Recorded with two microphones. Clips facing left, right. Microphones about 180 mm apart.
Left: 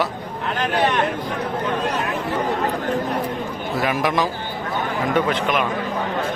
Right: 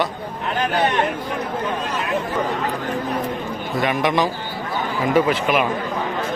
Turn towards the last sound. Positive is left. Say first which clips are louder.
# right 2 dB
turn(degrees=-5)  # may be behind; listen again after turning